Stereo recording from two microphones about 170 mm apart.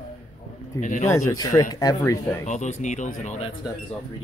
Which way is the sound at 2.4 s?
45° left (ahead or behind).